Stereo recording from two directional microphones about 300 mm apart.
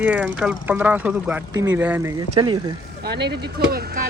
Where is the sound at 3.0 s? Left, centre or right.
Right.